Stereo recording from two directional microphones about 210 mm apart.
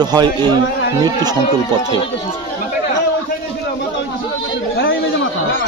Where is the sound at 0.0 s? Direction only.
20° right (ahead or behind).